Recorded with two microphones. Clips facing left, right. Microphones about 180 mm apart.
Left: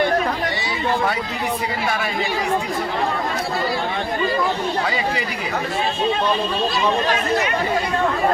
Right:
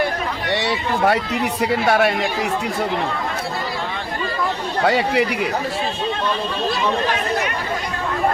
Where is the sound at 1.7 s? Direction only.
70° right (ahead or behind).